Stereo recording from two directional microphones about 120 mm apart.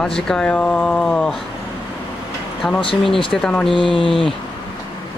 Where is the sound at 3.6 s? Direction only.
45° left (ahead or behind).